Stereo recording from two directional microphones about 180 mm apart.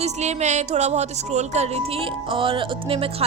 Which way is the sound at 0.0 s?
40° right (ahead or behind).